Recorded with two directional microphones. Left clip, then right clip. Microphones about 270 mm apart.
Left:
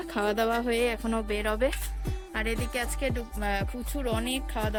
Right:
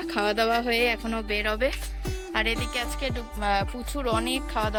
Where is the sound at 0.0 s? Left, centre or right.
Centre.